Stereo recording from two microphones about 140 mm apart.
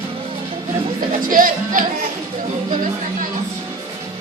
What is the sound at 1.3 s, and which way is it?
Music, 75° right (ahead or behind).